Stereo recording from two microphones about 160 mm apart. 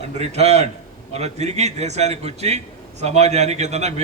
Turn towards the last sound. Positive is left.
turn(degrees=-45)  # may be behind; listen again after turning